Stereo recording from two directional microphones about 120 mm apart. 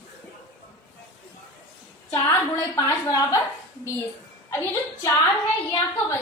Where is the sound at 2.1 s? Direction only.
25° left (ahead or behind).